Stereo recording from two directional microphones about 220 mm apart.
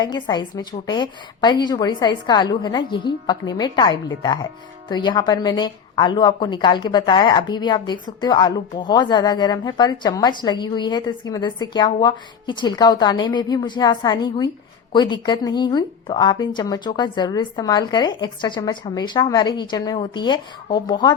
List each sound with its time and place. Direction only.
0.0 s a woman's voice: 20° left (ahead or behind)